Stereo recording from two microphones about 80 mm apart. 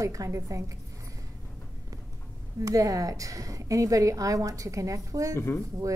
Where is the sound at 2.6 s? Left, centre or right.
Right.